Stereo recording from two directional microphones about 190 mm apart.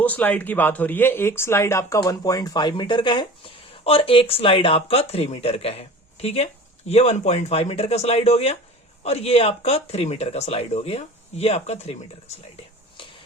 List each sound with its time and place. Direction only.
0.0 s speech: 10° left (ahead or behind); by 11.9 s 35° left (ahead or behind)